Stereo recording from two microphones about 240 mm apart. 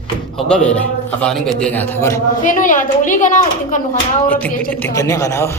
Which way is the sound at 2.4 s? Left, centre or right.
Left.